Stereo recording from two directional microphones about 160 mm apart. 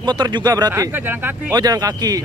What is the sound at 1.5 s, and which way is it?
Speech, 25° right (ahead or behind).